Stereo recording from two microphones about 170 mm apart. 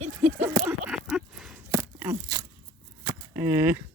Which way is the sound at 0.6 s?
5° right (ahead or behind).